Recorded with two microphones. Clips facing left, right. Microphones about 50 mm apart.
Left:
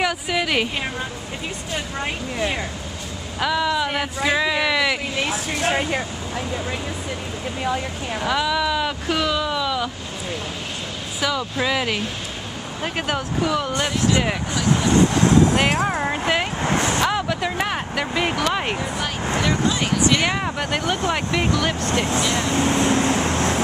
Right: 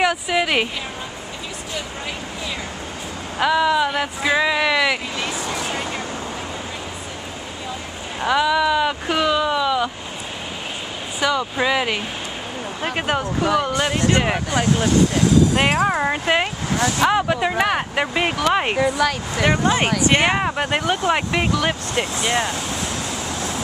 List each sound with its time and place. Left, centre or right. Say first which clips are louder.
0.0 s a woman's voice: right 3 dB; centre
3.3 s speech: right 4 dB; centre
8.2 s speech: right 4 dB; centre
11.1 s speech: right 3 dB; centre
14.9 s speech: left 3 dB; left
15.5 s speech: right 2 dB; right
16.6 s speech: left 1 dB; left
17.0 s speech: right 4 dB; centre
18.8 s speech: right 8 dB; right
19.4 s speech: right 6 dB; right
22.5 s vehicle: left 7 dB; left